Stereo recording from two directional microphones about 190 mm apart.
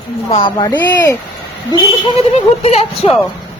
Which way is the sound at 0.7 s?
10° left (ahead or behind).